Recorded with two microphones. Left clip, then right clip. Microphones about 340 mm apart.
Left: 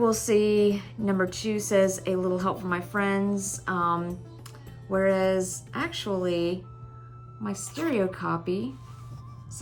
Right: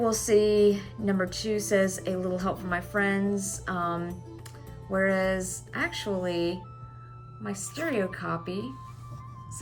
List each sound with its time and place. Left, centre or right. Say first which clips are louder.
0.0 s speech: even; centre